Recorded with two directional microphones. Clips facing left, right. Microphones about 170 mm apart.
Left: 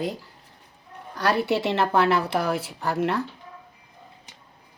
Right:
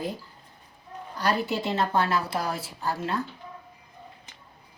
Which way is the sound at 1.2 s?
70° left (ahead or behind).